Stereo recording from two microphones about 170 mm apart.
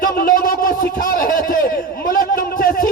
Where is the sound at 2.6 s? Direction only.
55° left (ahead or behind).